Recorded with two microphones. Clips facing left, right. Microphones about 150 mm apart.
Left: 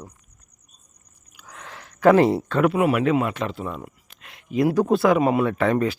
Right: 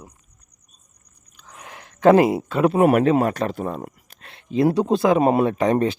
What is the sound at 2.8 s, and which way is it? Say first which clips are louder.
Speech: right 4 dB; 45° right (ahead or behind).